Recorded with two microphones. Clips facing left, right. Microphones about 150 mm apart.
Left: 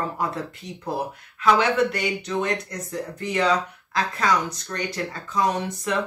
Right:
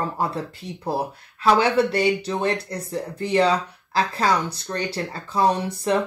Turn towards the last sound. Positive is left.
turn(degrees=-30)  # may be behind; listen again after turning